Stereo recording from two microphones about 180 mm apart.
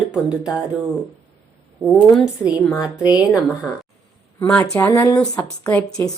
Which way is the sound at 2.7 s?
15° left (ahead or behind).